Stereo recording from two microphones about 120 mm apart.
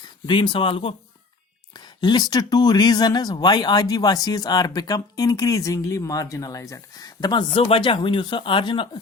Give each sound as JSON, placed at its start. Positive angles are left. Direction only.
{"t": 0.3, "sound": "speech", "side_deg": 45}
{"t": 1.7, "sound": "speech", "side_deg": 35}